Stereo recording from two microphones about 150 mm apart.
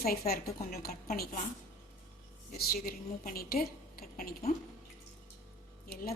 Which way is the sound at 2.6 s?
80° left.